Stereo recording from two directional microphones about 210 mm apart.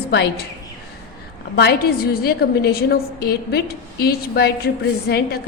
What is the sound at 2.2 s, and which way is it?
A woman's voice, 45° left (ahead or behind).